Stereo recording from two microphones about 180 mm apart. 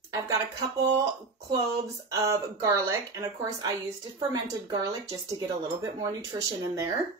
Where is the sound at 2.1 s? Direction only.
20° right (ahead or behind).